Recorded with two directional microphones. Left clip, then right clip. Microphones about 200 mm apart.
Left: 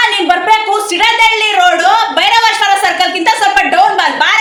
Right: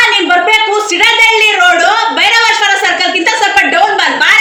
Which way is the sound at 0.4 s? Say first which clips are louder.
Right 1 dB; 20° left (ahead or behind).